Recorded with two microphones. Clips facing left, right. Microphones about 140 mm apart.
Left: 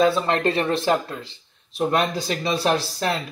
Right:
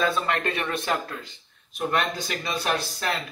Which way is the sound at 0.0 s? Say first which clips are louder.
Left 6 dB; 30° left (ahead or behind).